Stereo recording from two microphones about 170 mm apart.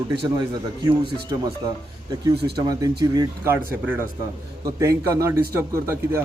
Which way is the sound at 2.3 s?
75° right (ahead or behind).